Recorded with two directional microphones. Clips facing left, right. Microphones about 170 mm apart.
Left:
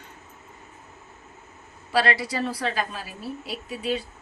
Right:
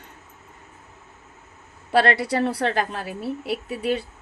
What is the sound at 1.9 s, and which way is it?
A woman's voice, 60° right (ahead or behind).